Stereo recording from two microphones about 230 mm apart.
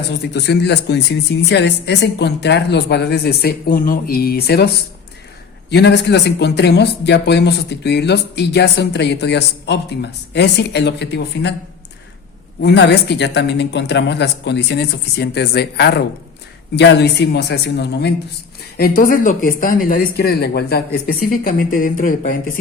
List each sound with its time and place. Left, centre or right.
0.3 s speech: left
5.7 s speech: left
12.6 s speech: left